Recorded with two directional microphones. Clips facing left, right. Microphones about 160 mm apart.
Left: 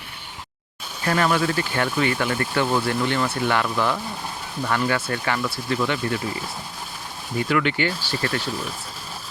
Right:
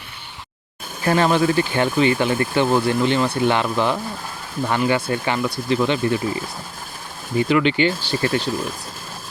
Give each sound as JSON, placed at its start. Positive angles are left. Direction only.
{"t": 1.0, "sound": "speech", "side_deg": -25}
{"t": 7.3, "sound": "speech", "side_deg": -20}